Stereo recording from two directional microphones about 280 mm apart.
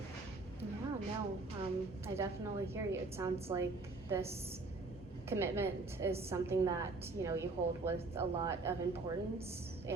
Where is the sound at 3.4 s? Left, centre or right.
Centre.